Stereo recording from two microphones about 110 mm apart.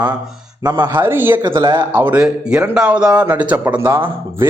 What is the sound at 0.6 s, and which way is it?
Speech, 35° right (ahead or behind).